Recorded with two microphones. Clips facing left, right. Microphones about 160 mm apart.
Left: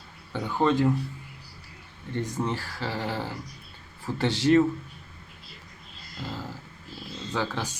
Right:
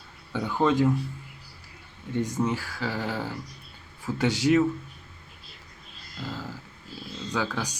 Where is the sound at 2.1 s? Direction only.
20° right (ahead or behind).